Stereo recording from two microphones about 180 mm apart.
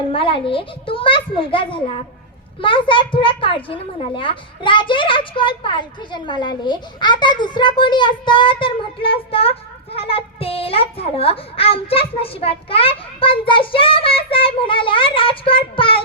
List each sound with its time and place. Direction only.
0.1 s a child's voice: 30° left (ahead or behind)